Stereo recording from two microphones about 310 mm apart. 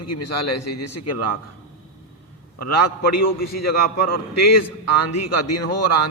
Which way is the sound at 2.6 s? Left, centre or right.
Left.